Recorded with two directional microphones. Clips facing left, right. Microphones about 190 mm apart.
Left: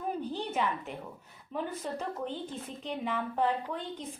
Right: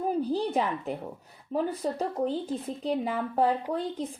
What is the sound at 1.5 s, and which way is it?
Speech, 35° right (ahead or behind).